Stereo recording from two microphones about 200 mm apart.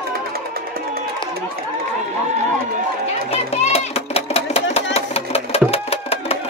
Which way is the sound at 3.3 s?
30° left (ahead or behind).